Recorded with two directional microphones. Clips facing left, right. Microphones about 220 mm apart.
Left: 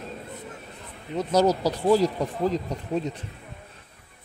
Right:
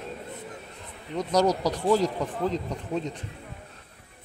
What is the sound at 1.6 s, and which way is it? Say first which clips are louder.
Speech: left 2 dB; 30° left (ahead or behind).